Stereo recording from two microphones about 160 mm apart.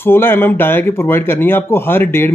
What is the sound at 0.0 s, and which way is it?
Speech, 15° left (ahead or behind).